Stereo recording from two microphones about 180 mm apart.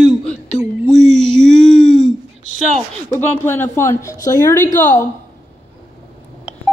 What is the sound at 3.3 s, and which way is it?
Speech, 10° left (ahead or behind).